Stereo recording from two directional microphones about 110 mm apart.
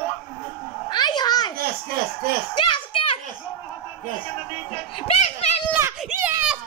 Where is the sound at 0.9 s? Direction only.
40° left (ahead or behind).